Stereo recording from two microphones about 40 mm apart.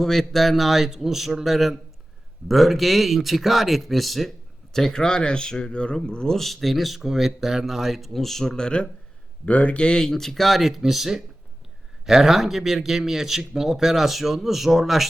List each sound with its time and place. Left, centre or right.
0.0 s speech: centre
6.4 s speech: centre; by 8.9 s left
9.5 s speech: left
10.0 s speech: centre